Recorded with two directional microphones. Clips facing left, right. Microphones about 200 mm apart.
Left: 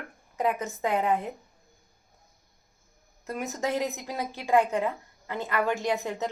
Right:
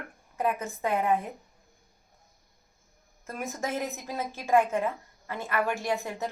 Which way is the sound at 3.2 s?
20° left (ahead or behind).